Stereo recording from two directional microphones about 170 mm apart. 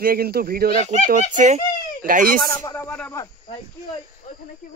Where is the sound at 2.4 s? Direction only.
15° left (ahead or behind).